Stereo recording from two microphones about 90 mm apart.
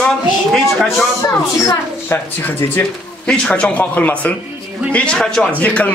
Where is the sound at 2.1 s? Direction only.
20° left (ahead or behind).